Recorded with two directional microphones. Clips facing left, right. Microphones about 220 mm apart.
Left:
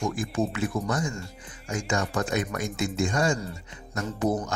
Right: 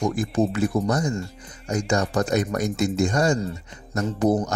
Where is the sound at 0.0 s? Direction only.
40° right (ahead or behind).